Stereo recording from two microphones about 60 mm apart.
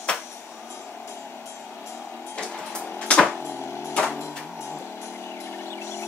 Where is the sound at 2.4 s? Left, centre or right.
Centre.